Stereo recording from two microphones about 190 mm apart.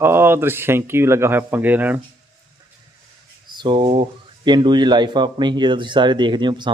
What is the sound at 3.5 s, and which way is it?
Speech, 25° right (ahead or behind).